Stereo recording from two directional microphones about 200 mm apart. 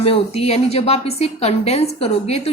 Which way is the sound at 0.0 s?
30° left (ahead or behind).